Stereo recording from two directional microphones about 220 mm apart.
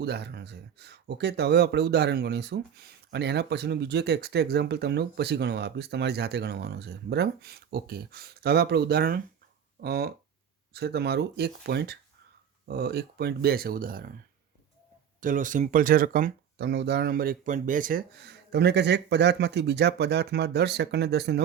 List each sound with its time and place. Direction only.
0.0 s speech: 50° right (ahead or behind)
15.2 s speech: 35° right (ahead or behind)